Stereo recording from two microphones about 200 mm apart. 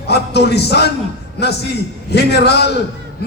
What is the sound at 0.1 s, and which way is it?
Speech, 55° left (ahead or behind).